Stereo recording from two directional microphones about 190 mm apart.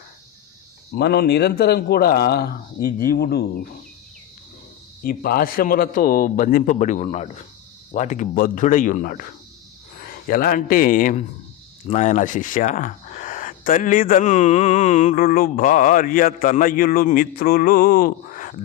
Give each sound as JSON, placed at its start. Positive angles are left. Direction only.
{"t": 0.9, "sound": "speech", "side_deg": 60}
{"t": 5.0, "sound": "a man's voice", "side_deg": 50}